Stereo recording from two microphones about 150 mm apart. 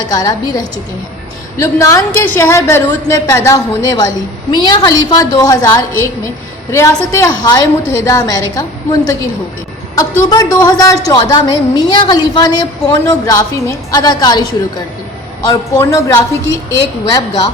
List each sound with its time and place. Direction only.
0.1 s a woman's voice: 25° left (ahead or behind)
15.4 s a woman's voice: 20° left (ahead or behind)